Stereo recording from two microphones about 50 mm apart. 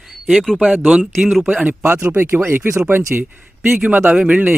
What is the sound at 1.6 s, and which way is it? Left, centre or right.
Speech, right.